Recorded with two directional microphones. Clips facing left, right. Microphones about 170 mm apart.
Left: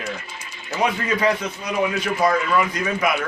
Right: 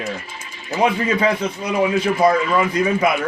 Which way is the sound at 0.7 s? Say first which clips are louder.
Right 4 dB; 25° right (ahead or behind).